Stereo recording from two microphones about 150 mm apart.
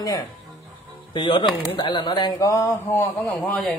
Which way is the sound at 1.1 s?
35° left (ahead or behind).